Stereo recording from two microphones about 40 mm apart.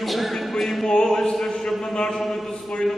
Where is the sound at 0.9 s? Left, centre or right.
Centre.